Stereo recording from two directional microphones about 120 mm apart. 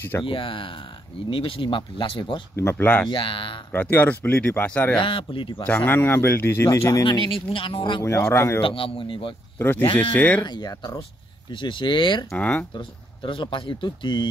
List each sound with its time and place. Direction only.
0.2 s speech: 45° left (ahead or behind)
2.5 s speech: 20° left (ahead or behind)
3.1 s speech: 45° left (ahead or behind)
3.7 s speech: 15° left (ahead or behind)
4.9 s speech: 45° left (ahead or behind)
5.7 s speech: 15° left (ahead or behind)
7.1 s speech: 45° left (ahead or behind)
8.0 s speech: 20° left (ahead or behind)
8.5 s speech: 45° left (ahead or behind)
9.6 s speech: 15° left (ahead or behind)
10.4 s speech: 35° left (ahead or behind)
12.3 s speech: 10° left (ahead or behind)
12.7 s speech: 45° left (ahead or behind)